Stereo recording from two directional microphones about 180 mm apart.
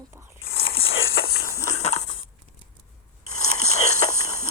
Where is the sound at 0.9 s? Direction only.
75° left (ahead or behind); by 1.5 s 60° left (ahead or behind).